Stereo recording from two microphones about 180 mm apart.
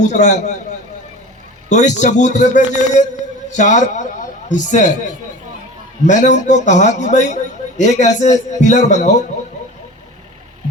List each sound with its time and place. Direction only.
0.0 s a man's voice: 40° left (ahead or behind)
1.7 s a man's voice: 40° left (ahead or behind)
6.1 s a man's voice: 40° left (ahead or behind)